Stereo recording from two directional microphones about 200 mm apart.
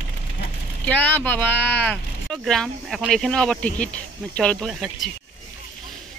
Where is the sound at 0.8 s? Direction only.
5° left (ahead or behind).